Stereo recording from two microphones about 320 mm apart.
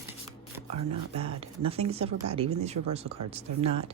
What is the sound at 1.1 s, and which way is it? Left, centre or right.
Speech, centre.